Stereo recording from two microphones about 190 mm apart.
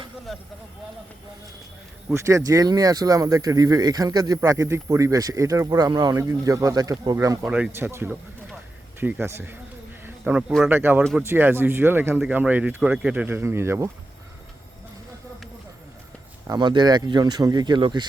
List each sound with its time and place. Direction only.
2.0 s speech: 15° right (ahead or behind)
7.4 s speech: 5° right (ahead or behind)
16.5 s speech: 25° right (ahead or behind)